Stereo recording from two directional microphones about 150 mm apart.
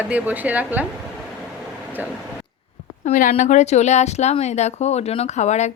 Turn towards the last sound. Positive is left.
turn(degrees=50)  # may be behind; listen again after turning